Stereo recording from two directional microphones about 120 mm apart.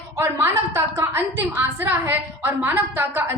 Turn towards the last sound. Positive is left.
turn(degrees=-15)  # may be behind; listen again after turning